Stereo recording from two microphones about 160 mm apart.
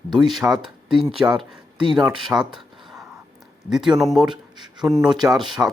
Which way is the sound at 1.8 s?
30° right (ahead or behind).